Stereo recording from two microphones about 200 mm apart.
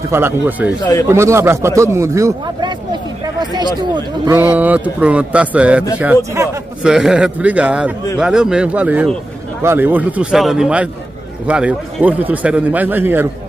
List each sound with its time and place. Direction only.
0.1 s a man's voice: 10° right (ahead or behind)
4.4 s a man's voice: 10° right (ahead or behind)